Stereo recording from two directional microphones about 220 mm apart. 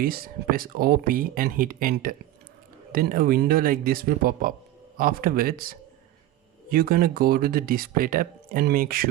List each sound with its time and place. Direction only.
0.0 s speech: 40° right (ahead or behind)